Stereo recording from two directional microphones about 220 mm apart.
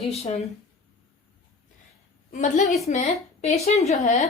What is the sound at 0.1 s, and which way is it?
Speech, 25° left (ahead or behind).